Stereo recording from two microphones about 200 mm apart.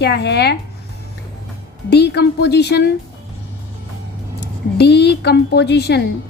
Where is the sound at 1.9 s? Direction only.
55° left (ahead or behind).